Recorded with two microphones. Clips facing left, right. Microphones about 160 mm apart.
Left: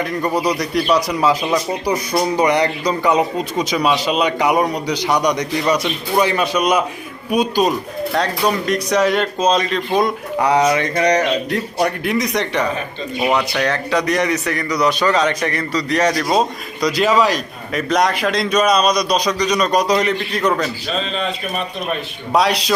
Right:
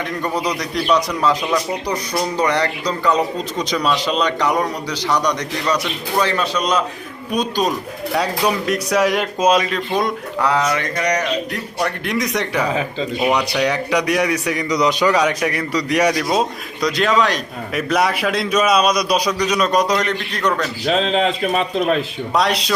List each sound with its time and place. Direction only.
0.0 s a man's voice: 5° left (ahead or behind)
8.1 s a man's voice: 5° right (ahead or behind)
10.4 s mantra: 20° left (ahead or behind)
12.0 s a man's voice: centre (ahead or behind)
13.5 s a man's voice: 15° right (ahead or behind)
16.8 s a man's voice: centre (ahead or behind)
20.8 s speech: 90° right
22.3 s a man's voice: centre (ahead or behind)